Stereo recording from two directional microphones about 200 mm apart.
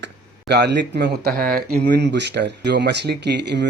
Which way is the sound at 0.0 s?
55° right (ahead or behind).